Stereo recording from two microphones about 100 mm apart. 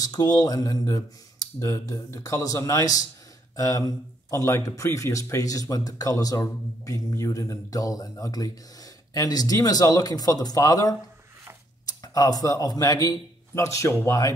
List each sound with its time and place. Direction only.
0.0 s a man's voice: 40° left (ahead or behind)